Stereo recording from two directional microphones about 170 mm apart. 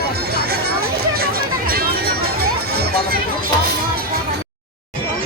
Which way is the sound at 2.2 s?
65° right (ahead or behind).